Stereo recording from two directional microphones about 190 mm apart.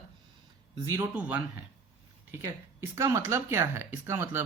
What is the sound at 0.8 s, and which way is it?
Speech, 15° right (ahead or behind).